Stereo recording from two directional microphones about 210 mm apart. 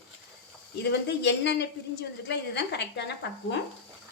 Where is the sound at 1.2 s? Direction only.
55° left (ahead or behind).